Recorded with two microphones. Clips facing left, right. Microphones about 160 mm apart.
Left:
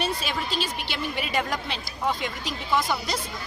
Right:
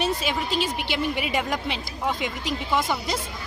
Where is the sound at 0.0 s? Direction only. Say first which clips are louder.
Right 3 dB; 15° right (ahead or behind).